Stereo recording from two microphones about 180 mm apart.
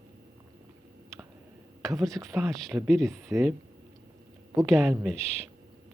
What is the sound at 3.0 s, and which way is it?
Speech, 15° right (ahead or behind).